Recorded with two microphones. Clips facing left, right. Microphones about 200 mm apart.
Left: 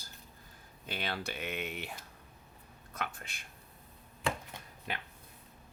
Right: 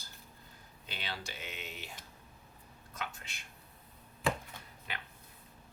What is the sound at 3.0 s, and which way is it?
Speech, 55° left (ahead or behind).